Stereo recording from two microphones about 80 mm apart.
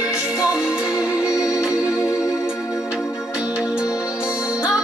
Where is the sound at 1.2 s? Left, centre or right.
Left.